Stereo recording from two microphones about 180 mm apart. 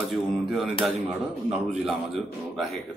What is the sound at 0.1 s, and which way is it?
Speech, centre (ahead or behind).